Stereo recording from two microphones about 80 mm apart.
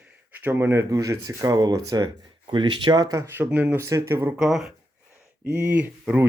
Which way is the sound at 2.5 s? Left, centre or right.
Right.